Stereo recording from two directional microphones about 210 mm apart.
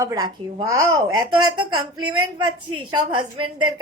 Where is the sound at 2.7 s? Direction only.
20° right (ahead or behind).